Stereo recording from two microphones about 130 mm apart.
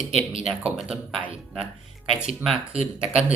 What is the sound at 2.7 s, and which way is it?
Speech, 50° right (ahead or behind).